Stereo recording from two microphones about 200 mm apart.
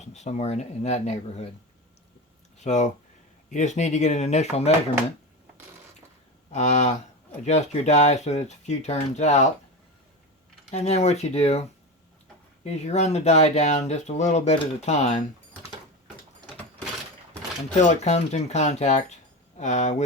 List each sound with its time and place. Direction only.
0.0 s speech: 35° left (ahead or behind)
2.6 s speech: 35° left (ahead or behind)
6.5 s speech: 35° left (ahead or behind)
10.7 s speech: 35° left (ahead or behind)
12.6 s speech: 35° left (ahead or behind)
17.7 s speech: 35° left (ahead or behind)